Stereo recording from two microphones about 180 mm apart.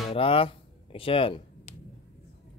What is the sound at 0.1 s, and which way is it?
Music, 30° left (ahead or behind).